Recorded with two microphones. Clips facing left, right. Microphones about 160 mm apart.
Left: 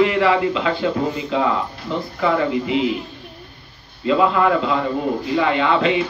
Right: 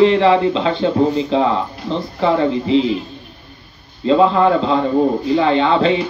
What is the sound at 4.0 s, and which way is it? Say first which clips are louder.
Speech: right 4 dB; 30° right (ahead or behind).